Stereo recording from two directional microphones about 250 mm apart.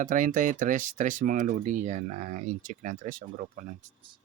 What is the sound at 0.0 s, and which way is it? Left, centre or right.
Speech, right.